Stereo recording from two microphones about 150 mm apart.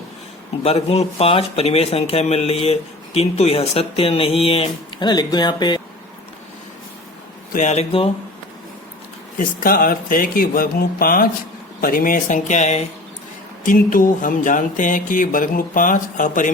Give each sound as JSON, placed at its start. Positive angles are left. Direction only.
{"t": 0.6, "sound": "speech", "side_deg": 40}
{"t": 5.0, "sound": "speech", "side_deg": 25}
{"t": 7.5, "sound": "speech", "side_deg": 50}
{"t": 9.4, "sound": "speech", "side_deg": 70}
{"t": 13.7, "sound": "speech", "side_deg": 65}